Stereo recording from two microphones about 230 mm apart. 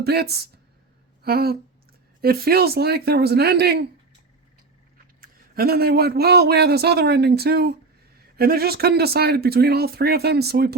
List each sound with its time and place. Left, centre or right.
0.0 s a man's voice: right
1.2 s a sound: right
2.2 s a man's voice: right
5.2 s a man's voice: right